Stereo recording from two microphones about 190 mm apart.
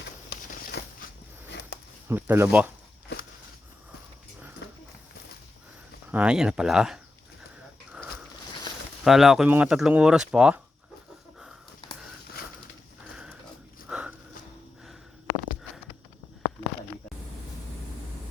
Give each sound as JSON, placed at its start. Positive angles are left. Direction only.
{"t": 0.3, "sound": "a sound", "side_deg": 60}
{"t": 2.0, "sound": "speech", "side_deg": -10}
{"t": 4.6, "sound": "horse", "side_deg": 65}
{"t": 6.1, "sound": "speech", "side_deg": -5}
{"t": 9.0, "sound": "speech", "side_deg": 0}
{"t": 13.8, "sound": "a sound", "side_deg": -5}